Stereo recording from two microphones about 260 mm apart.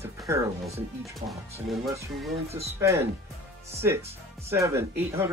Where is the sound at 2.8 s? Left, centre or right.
Centre.